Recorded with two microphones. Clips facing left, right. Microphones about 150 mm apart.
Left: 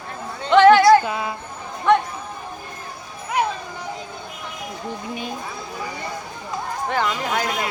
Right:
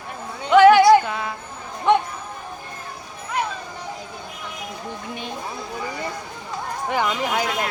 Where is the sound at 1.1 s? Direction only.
10° left (ahead or behind).